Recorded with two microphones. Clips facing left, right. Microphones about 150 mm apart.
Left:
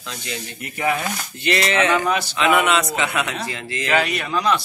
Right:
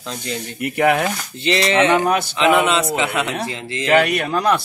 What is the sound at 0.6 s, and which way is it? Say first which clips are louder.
Speech: right 7 dB; 65° right (ahead or behind).